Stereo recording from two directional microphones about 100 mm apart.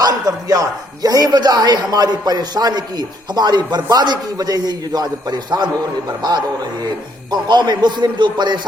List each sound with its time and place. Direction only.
0.0 s speech: 35° right (ahead or behind)
7.3 s speech: 50° right (ahead or behind)